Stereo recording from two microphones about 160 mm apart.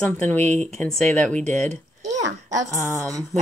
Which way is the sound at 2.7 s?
15° left (ahead or behind).